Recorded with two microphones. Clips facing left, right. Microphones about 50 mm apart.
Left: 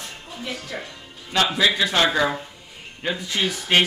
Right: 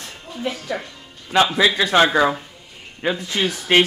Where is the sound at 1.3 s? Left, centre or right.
Centre.